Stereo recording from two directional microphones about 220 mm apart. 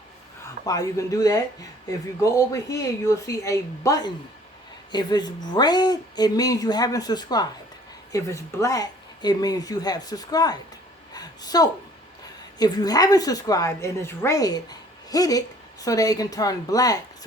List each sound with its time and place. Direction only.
0.6 s a woman's voice: 15° left (ahead or behind)
11.1 s a sound: 15° left (ahead or behind)
12.5 s a woman's voice: 20° left (ahead or behind)